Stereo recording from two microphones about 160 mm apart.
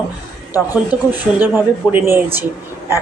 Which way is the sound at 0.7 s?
10° right (ahead or behind).